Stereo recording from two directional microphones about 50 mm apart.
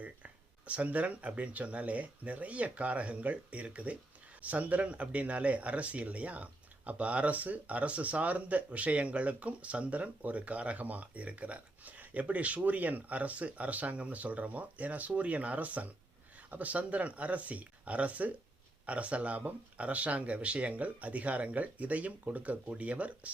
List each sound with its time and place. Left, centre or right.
0.7 s speech: right